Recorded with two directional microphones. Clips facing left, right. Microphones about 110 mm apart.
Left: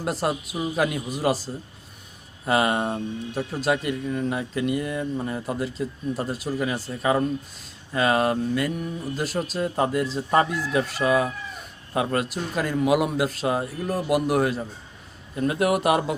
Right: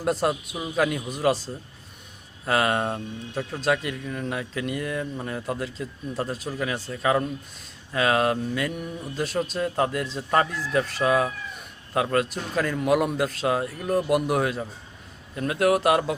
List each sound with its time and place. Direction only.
0.0 s speech: 5° left (ahead or behind)
2.5 s speech: 10° left (ahead or behind)